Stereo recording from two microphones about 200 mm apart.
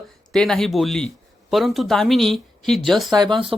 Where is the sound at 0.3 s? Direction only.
Centre (ahead or behind).